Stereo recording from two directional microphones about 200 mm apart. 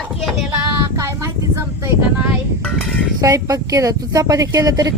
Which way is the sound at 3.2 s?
15° right (ahead or behind).